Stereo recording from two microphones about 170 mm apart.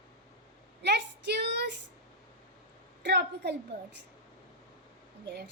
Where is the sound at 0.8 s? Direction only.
80° right.